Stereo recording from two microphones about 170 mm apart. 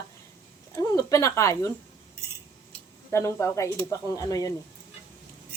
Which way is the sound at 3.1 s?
15° left (ahead or behind).